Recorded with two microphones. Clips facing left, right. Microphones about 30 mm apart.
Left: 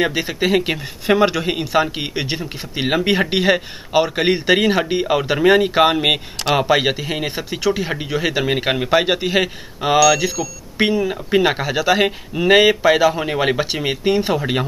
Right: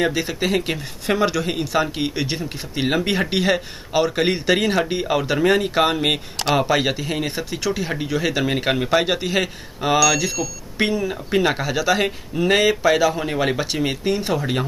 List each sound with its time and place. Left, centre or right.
0.0 s speech: centre